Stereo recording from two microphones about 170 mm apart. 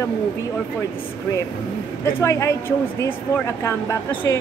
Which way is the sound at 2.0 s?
15° left (ahead or behind).